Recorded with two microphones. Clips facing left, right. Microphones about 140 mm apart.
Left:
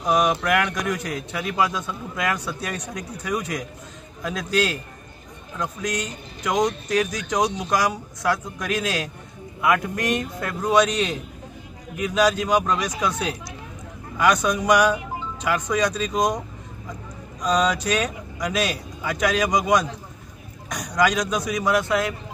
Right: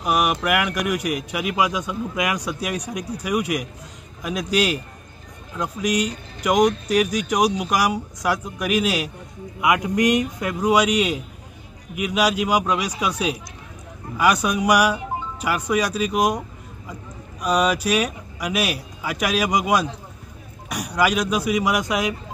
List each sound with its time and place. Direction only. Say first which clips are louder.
0.0 s a man's voice: left 1 dB; 10° right (ahead or behind)